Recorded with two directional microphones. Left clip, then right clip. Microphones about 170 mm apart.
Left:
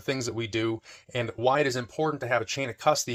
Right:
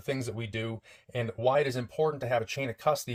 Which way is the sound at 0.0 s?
25° left (ahead or behind).